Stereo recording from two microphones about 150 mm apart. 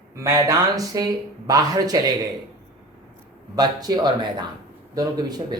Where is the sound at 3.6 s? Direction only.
30° right (ahead or behind).